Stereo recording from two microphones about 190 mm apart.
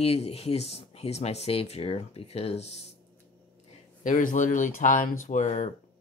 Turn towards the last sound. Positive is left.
turn(degrees=35)  # may be behind; listen again after turning